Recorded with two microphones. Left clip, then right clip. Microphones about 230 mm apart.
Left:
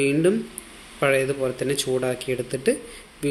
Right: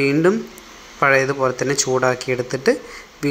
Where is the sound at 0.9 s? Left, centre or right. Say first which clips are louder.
Right 5 dB; centre.